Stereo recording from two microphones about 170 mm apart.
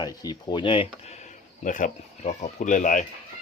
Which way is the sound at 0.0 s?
25° left (ahead or behind).